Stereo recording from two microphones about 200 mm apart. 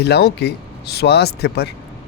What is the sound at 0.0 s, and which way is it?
Speech, 55° left (ahead or behind).